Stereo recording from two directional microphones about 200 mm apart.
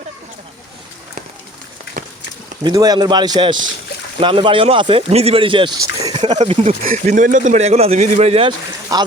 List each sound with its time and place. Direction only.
2.6 s speech: 20° right (ahead or behind)
6.4 s speech: 30° right (ahead or behind)